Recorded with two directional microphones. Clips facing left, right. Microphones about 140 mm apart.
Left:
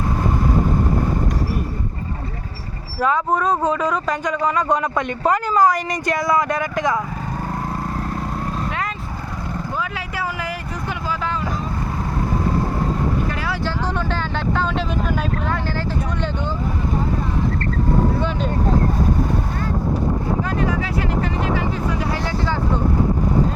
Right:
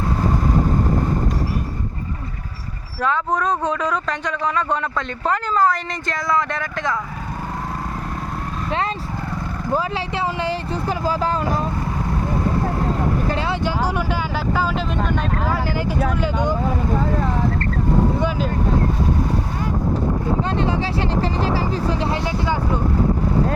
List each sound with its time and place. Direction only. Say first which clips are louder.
3.0 s speech: left 2 dB; 10° left (ahead or behind)
9.7 s speech: right 8 dB; 30° right (ahead or behind)
13.7 s speech: right 2 dB; 10° right (ahead or behind)
16.2 s speech: right 4 dB; 15° right (ahead or behind)
20.6 s speech: right 1 dB; 30° right (ahead or behind)